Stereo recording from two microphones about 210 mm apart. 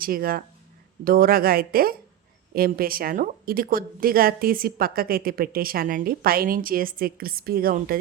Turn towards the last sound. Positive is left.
turn(degrees=-45)  # may be behind; listen again after turning